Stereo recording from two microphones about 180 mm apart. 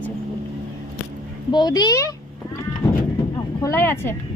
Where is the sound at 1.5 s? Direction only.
25° left (ahead or behind).